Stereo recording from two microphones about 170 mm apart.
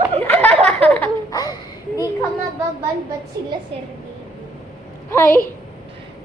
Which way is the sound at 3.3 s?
20° right (ahead or behind).